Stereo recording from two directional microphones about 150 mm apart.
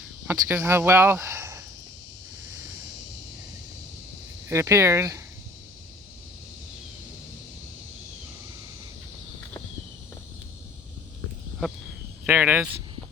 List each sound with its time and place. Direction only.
0.3 s speech: 15° right (ahead or behind)
4.4 s speech: 20° right (ahead or behind)
12.2 s speech: 10° right (ahead or behind)